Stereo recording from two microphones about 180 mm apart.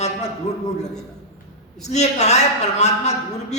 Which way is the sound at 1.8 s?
40° left (ahead or behind).